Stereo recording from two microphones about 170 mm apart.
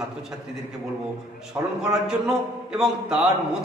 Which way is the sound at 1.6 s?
15° right (ahead or behind).